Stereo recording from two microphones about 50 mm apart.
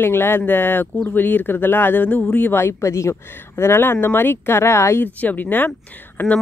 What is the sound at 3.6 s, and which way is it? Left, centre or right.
Speech, left.